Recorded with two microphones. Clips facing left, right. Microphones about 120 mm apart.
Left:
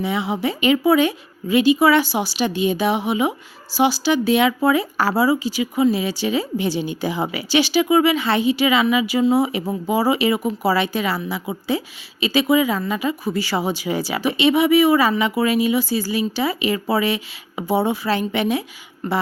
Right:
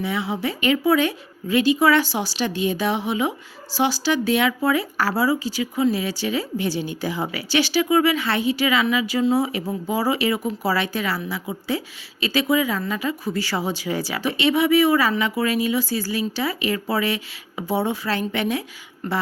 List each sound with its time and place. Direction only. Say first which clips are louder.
0.0 s speech: left 3 dB; 20° left (ahead or behind)
12.2 s speech: left 3 dB; 15° left (ahead or behind)